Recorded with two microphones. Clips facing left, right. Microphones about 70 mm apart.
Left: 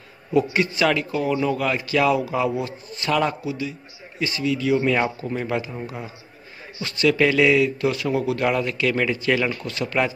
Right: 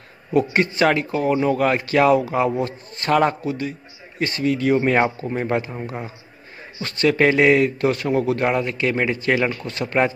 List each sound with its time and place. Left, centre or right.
0.3 s a man's voice: right